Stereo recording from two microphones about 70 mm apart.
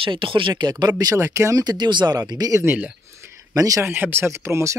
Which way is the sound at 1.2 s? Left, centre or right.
Right.